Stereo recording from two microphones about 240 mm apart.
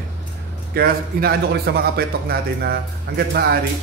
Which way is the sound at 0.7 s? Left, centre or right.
Right.